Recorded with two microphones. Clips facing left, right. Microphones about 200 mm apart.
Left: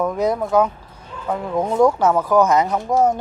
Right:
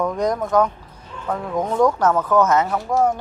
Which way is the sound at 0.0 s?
5° left (ahead or behind).